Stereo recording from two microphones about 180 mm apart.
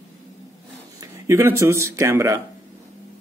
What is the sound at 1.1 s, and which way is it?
Speech, 15° right (ahead or behind).